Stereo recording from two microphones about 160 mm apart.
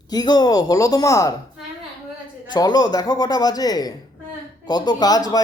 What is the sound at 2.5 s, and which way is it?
Speech, 25° left (ahead or behind).